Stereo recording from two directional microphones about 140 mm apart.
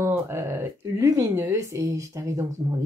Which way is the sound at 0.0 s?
15° right (ahead or behind).